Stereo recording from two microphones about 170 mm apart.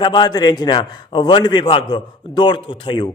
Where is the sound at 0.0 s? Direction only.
25° left (ahead or behind).